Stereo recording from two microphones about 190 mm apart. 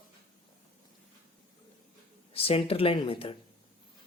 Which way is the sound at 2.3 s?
30° left (ahead or behind).